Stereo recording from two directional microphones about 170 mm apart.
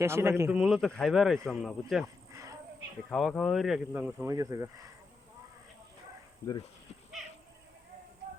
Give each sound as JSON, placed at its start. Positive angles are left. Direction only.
{"t": 0.0, "sound": "a man's voice", "side_deg": -15}
{"t": 0.6, "sound": "speech", "side_deg": 0}
{"t": 2.3, "sound": "a sound", "side_deg": -20}
{"t": 3.1, "sound": "speech", "side_deg": 0}